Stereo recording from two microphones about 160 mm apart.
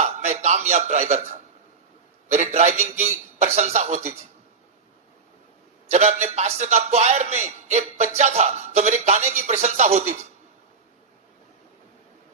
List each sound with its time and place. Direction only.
0.0 s a man's voice: 45° right (ahead or behind)
5.9 s a man's voice: 45° right (ahead or behind)